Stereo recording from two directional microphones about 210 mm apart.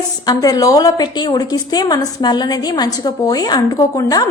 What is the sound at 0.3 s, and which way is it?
A woman's voice, 15° left (ahead or behind).